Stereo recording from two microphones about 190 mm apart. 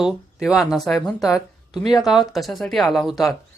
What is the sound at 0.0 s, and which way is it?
Speech, 5° right (ahead or behind).